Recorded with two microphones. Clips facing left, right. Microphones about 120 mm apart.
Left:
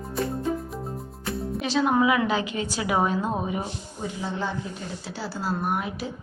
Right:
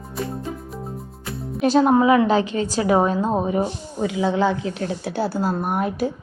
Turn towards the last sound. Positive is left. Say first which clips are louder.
# right 6 dB
turn(degrees=-50)  # may be behind; listen again after turning